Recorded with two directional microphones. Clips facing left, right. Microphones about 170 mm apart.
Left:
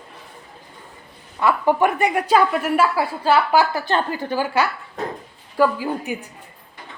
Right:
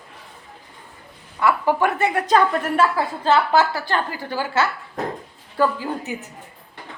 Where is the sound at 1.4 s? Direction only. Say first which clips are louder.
Left 1 dB; 20° left (ahead or behind).